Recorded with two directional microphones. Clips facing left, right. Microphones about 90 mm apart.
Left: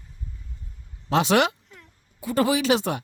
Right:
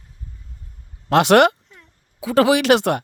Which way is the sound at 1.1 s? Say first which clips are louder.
Right 7 dB; 65° right (ahead or behind).